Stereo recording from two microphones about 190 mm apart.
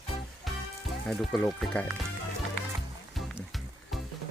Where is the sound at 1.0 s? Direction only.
5° left (ahead or behind).